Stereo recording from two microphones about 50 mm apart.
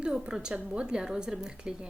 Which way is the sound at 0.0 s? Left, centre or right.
Centre.